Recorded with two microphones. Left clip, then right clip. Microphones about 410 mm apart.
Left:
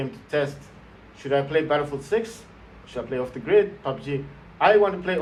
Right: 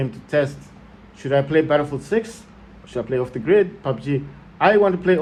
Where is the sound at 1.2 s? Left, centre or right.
Right.